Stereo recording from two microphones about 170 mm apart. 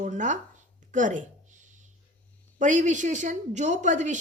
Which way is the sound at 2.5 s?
45° right (ahead or behind).